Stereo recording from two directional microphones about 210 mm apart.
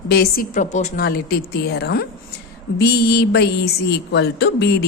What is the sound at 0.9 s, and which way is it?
A woman's voice, 45° left (ahead or behind).